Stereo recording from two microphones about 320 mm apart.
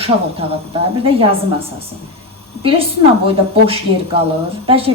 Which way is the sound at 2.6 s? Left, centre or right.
Centre.